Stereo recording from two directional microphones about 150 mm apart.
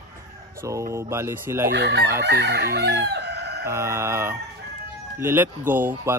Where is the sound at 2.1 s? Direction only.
90° right.